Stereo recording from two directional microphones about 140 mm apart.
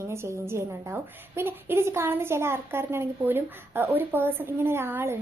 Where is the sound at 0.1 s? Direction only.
20° right (ahead or behind).